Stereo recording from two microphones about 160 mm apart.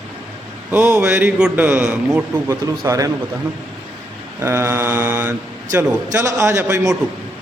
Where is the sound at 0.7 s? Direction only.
10° right (ahead or behind).